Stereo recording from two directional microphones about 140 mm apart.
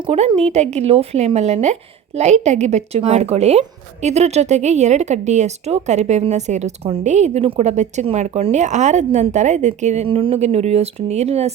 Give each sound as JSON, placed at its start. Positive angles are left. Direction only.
{"t": 0.0, "sound": "speech", "side_deg": -45}